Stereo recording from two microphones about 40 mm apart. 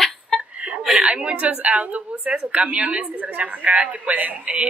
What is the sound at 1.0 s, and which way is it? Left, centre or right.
A woman's voice, right.